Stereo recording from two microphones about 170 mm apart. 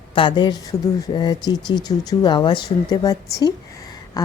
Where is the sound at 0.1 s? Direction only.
30° left (ahead or behind).